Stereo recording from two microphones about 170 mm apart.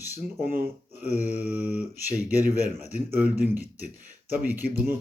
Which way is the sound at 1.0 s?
10° right (ahead or behind).